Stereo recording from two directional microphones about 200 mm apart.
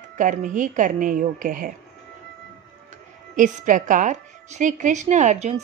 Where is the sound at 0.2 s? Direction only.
40° right (ahead or behind).